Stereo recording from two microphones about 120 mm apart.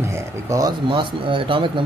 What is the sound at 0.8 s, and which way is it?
Speech, 45° right (ahead or behind).